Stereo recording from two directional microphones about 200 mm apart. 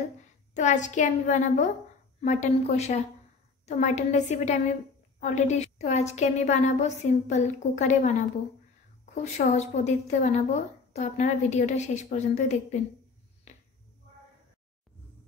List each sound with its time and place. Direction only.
0.6 s a woman's voice: 35° left (ahead or behind)
9.5 s a woman's voice: 35° left (ahead or behind)